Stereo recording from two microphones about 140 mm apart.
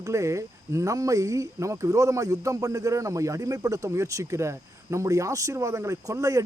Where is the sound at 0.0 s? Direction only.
20° right (ahead or behind).